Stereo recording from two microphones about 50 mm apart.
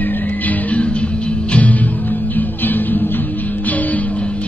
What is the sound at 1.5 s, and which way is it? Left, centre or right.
Music, left.